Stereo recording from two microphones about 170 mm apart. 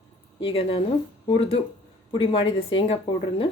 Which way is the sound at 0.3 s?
30° left (ahead or behind).